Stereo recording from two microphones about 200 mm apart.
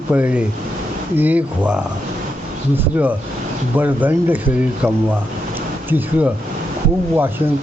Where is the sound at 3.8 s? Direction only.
10° right (ahead or behind).